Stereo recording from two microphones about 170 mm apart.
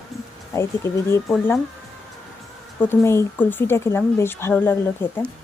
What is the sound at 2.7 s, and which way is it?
Speech, 15° left (ahead or behind).